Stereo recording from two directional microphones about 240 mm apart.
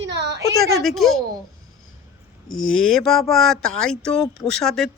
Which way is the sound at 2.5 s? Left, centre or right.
Left.